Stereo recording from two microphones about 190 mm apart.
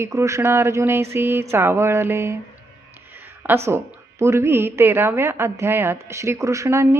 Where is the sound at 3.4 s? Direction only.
15° right (ahead or behind).